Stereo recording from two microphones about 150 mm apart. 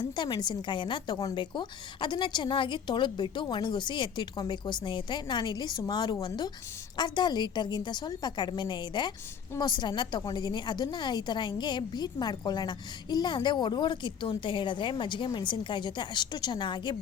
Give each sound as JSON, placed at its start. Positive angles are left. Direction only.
{"t": 0.0, "sound": "a woman's voice", "side_deg": 30}